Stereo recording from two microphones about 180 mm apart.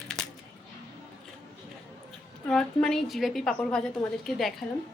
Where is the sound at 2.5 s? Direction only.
5° left (ahead or behind).